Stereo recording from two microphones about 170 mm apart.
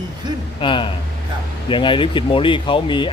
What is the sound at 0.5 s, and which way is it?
Speech, 30° left (ahead or behind).